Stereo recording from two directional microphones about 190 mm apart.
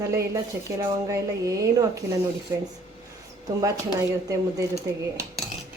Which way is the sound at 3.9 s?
15° right (ahead or behind).